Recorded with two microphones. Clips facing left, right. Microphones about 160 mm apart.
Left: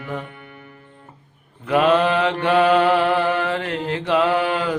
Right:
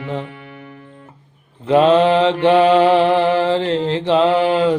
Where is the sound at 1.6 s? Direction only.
25° right (ahead or behind).